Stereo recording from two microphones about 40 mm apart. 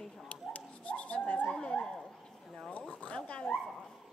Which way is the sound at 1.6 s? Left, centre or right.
Left.